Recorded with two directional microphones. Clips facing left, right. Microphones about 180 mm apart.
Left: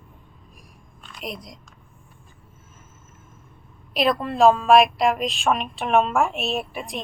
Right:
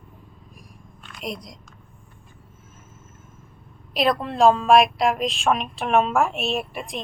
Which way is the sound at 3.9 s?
Centre (ahead or behind).